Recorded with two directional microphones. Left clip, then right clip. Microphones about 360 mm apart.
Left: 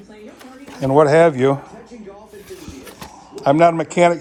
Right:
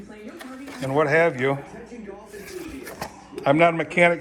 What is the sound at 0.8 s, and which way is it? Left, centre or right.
Speech, centre.